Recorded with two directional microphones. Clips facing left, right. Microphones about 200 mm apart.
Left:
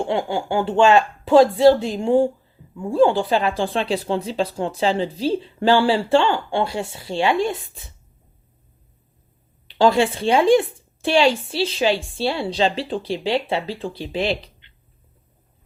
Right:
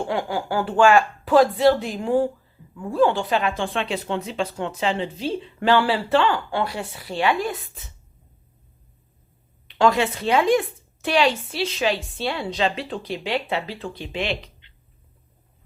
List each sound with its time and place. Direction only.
0.0 s speech: 25° left (ahead or behind)
9.6 s speech: 30° left (ahead or behind)